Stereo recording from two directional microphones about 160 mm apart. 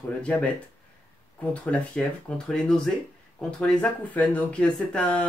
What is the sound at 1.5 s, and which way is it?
Speech, 5° left (ahead or behind).